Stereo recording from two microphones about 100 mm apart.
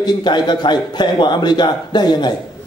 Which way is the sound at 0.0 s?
50° left (ahead or behind).